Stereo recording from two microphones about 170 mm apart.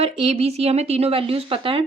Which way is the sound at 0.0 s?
35° right (ahead or behind).